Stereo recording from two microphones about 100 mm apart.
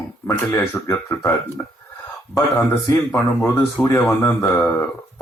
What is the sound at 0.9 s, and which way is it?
Speech, 25° left (ahead or behind).